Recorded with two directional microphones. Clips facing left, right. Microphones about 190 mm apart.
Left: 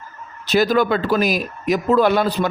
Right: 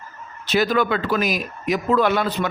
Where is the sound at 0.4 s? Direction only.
40° left (ahead or behind).